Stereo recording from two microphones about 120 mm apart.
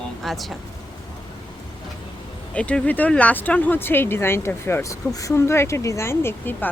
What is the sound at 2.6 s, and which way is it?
Speech, 10° left (ahead or behind).